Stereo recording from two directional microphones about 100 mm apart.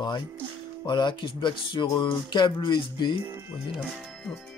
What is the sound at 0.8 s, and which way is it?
Speech, 50° left (ahead or behind).